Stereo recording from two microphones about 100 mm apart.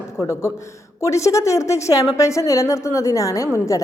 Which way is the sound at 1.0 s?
30° left (ahead or behind).